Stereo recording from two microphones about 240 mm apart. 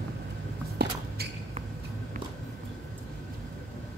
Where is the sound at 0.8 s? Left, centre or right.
Right.